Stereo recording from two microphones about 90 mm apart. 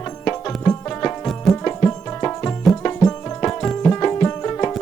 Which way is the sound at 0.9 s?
20° left (ahead or behind).